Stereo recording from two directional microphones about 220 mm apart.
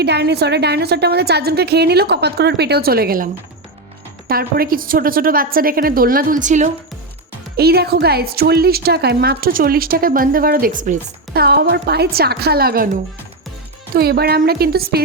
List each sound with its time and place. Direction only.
0.0 s a woman's voice: 50° right (ahead or behind)
4.3 s a woman's voice: 40° right (ahead or behind)
7.5 s a woman's voice: 45° right (ahead or behind)